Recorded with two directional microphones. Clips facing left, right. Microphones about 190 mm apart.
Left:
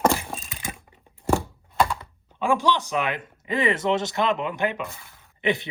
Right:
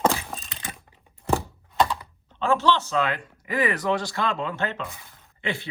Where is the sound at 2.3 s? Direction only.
15° left (ahead or behind).